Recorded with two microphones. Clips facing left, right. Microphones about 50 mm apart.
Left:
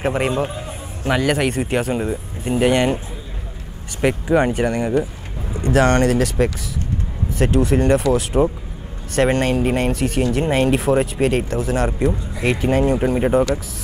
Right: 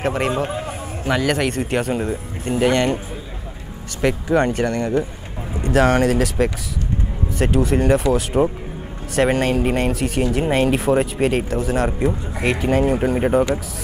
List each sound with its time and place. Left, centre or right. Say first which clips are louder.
0.0 s a man's voice: left 1 dB; centre
0.5 s a sound: right 4 dB; centre
1.0 s a man's voice: left 1 dB; centre
4.3 s a man's voice: left 1 dB; centre
5.5 s speech: even; centre